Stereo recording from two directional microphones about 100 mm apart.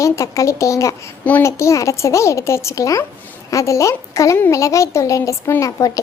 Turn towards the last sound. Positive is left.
turn(degrees=35)  # may be behind; listen again after turning